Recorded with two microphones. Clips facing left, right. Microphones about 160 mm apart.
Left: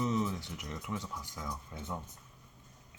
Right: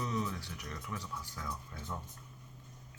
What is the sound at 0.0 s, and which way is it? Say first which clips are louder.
Speech: left 4 dB; 25° left (ahead or behind).